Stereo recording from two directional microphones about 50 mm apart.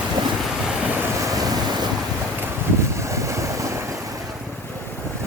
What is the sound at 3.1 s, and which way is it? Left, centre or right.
Vehicle, right.